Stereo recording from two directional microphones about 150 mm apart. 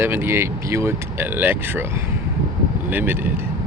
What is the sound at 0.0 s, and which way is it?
A man's voice, 15° right (ahead or behind).